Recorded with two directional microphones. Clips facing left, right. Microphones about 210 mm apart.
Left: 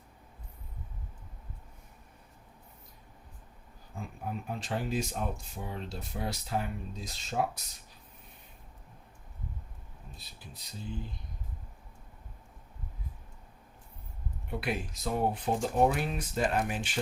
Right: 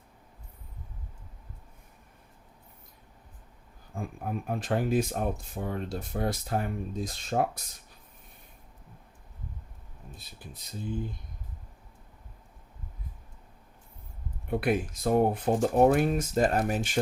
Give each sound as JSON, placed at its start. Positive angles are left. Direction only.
{"t": 3.9, "sound": "speech", "side_deg": -50}
{"t": 10.1, "sound": "speech", "side_deg": -50}
{"t": 14.5, "sound": "speech", "side_deg": -50}